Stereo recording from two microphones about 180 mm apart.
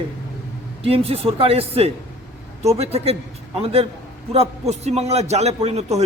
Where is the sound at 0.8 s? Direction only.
30° right (ahead or behind).